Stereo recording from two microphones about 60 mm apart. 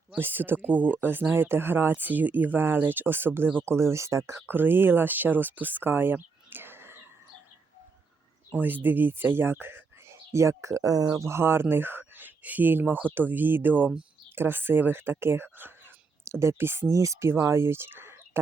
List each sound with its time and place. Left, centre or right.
0.2 s speech: right
4.3 s speech: right
8.5 s speech: right
10.3 s speech: right
11.2 s speech: right
16.2 s speech: right
16.9 s speech: right